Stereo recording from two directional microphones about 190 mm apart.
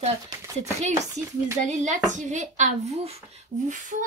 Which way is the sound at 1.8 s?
40° right (ahead or behind).